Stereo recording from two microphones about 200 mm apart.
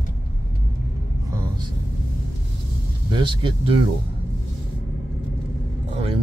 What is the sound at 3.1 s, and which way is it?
Speech, 25° right (ahead or behind).